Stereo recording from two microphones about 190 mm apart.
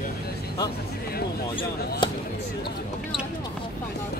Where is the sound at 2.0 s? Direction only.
25° left (ahead or behind).